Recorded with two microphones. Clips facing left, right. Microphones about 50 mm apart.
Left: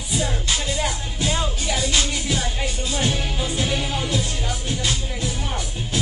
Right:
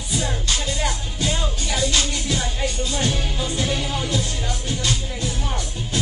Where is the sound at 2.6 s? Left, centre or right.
Left.